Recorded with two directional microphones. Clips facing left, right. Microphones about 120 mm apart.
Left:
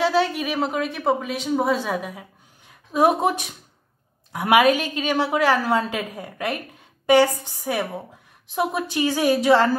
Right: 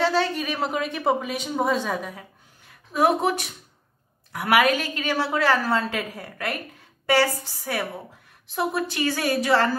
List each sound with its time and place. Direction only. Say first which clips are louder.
0.0 s speech: left 2 dB; 10° left (ahead or behind)
2.9 s a woman's voice: left 2 dB; 20° left (ahead or behind)